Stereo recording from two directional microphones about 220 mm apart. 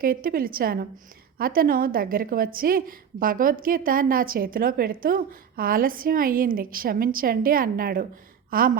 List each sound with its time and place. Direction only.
0.0 s a woman's voice: 40° right (ahead or behind)